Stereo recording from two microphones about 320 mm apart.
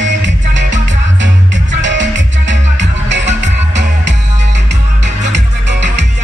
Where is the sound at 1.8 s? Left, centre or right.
Right.